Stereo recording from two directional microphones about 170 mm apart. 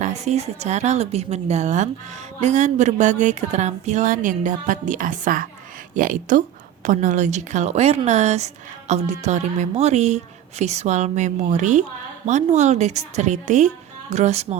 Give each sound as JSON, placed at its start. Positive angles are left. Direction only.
{"t": 0.0, "sound": "a woman's voice", "side_deg": -40}